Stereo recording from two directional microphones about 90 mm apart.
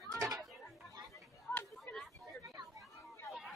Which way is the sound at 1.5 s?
20° left (ahead or behind).